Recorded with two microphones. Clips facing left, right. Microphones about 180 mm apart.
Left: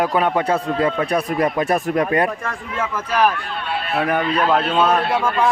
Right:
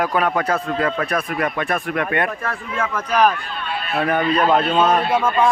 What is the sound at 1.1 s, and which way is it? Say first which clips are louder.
Speech: left 3 dB; 30° left (ahead or behind).